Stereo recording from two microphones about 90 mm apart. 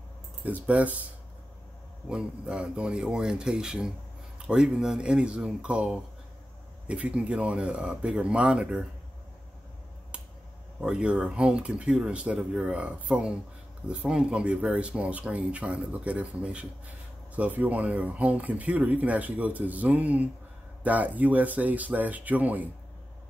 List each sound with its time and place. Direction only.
0.4 s speech: 15° right (ahead or behind)
2.0 s speech: 10° right (ahead or behind)
10.8 s speech: 10° right (ahead or behind)